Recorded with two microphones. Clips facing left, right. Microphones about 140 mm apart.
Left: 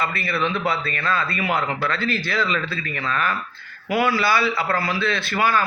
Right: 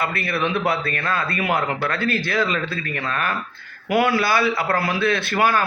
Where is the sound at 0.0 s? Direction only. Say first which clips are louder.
Right 1 dB; 55° right (ahead or behind).